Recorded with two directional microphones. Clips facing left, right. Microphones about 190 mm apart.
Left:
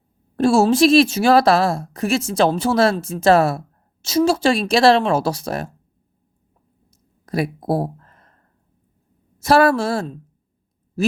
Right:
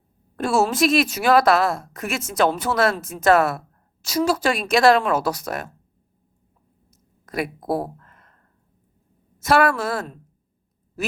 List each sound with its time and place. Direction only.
0.3 s a woman's voice: 30° left (ahead or behind)
6.9 s a sound: 35° left (ahead or behind)
9.4 s a woman's voice: 35° left (ahead or behind)